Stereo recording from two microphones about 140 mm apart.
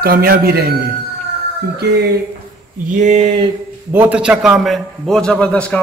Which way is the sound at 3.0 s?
55° right (ahead or behind).